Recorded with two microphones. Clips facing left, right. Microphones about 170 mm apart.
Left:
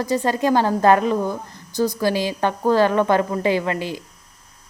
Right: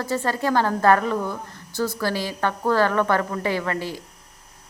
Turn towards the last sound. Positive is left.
turn(degrees=20)  # may be behind; listen again after turning